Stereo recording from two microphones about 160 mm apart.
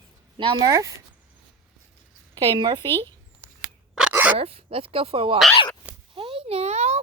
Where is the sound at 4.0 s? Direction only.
10° right (ahead or behind).